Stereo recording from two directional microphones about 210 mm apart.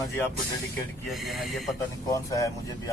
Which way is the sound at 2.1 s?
15° left (ahead or behind).